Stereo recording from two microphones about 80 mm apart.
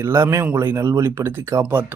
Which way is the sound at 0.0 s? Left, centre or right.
Right.